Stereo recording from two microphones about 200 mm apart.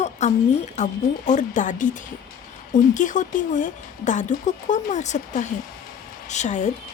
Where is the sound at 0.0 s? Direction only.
35° left (ahead or behind).